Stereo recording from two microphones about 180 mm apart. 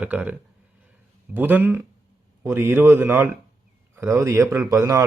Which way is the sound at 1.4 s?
10° right (ahead or behind).